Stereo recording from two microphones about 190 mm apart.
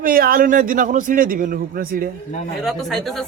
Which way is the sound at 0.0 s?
50° right (ahead or behind).